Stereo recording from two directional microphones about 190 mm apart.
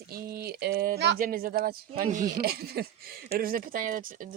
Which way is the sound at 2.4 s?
55° right (ahead or behind).